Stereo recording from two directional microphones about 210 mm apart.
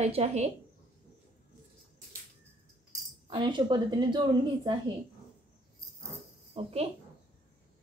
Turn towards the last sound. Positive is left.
turn(degrees=-25)  # may be behind; listen again after turning